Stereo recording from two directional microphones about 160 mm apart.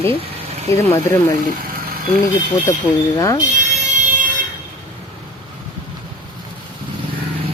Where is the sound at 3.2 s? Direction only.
20° left (ahead or behind).